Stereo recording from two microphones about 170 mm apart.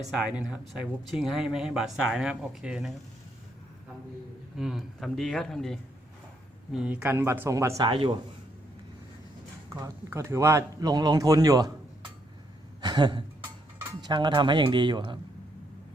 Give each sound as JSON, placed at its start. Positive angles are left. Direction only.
{"t": 0.2, "sound": "speech", "side_deg": -5}
{"t": 4.5, "sound": "speech", "side_deg": 0}
{"t": 9.8, "sound": "speech", "side_deg": -15}
{"t": 12.8, "sound": "a sound", "side_deg": -25}
{"t": 14.0, "sound": "speech", "side_deg": -25}